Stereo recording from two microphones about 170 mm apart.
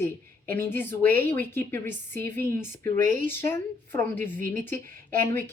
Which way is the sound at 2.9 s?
50° right (ahead or behind).